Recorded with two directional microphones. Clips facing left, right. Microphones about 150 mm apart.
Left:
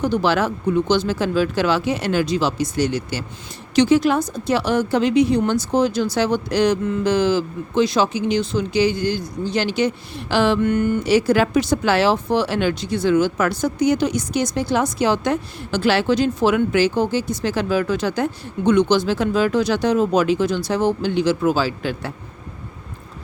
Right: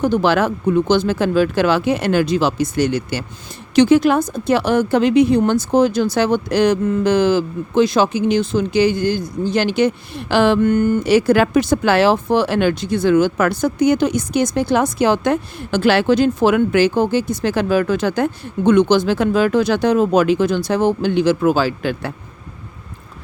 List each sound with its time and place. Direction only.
0.0 s speech: 50° right (ahead or behind)